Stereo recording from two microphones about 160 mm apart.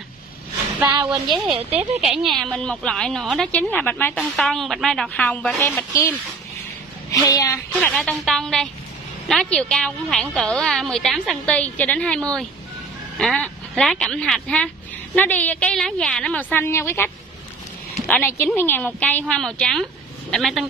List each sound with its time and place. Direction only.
1.8 s a woman's voice: 5° right (ahead or behind)
7.1 s a woman's voice: 20° left (ahead or behind)
7.8 s a woman's voice: 5° left (ahead or behind)